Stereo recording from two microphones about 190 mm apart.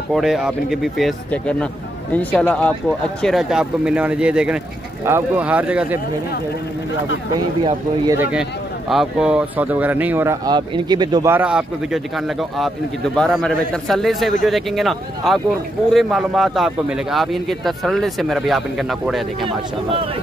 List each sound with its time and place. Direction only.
0.1 s a man's voice: 5° right (ahead or behind)
7.3 s speech: 20° right (ahead or behind)
8.2 s speech: 5° right (ahead or behind); by 11.3 s 20° right (ahead or behind)
11.3 s a man's voice: 5° right (ahead or behind)